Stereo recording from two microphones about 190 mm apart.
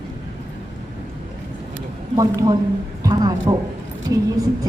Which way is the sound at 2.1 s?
20° right (ahead or behind).